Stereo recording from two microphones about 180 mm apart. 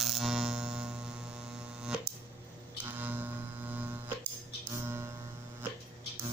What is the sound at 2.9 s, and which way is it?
Music, 10° right (ahead or behind).